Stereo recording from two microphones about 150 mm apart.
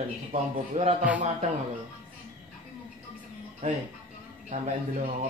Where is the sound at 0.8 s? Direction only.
45° right (ahead or behind).